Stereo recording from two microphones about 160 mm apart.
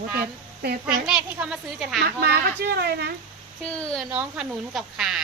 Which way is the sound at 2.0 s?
80° right.